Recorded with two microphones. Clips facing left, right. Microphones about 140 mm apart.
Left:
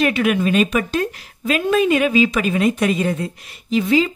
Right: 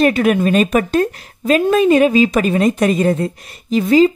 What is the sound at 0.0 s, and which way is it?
Speech, 40° right (ahead or behind).